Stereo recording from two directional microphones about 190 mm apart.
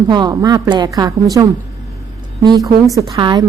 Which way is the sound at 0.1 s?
20° right (ahead or behind).